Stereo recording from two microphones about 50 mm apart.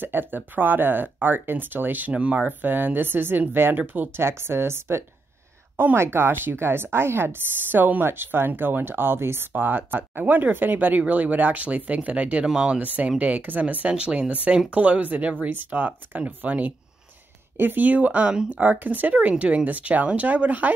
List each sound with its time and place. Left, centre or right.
0.0 s speech: right
4.2 s a woman's voice: right
9.5 s speech: right
12.8 s speech: right